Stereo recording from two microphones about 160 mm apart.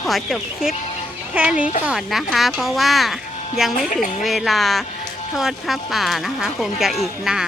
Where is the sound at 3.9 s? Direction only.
55° left (ahead or behind).